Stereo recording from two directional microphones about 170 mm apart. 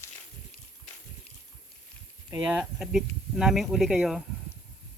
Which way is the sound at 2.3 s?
10° right (ahead or behind).